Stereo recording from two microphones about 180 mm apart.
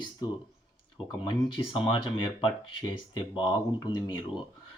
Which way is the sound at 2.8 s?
25° left (ahead or behind).